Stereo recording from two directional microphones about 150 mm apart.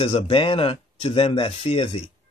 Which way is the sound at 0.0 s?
35° left (ahead or behind).